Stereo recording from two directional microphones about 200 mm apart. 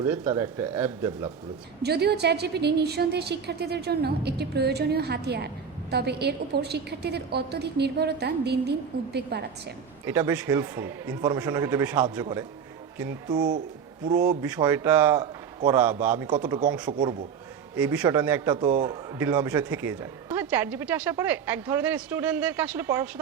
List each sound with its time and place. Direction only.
0.0 s speech: 10° right (ahead or behind)
1.8 s a woman's voice: 55° right (ahead or behind)
10.1 s speech: 10° right (ahead or behind)
16.6 s speech: 5° right (ahead or behind)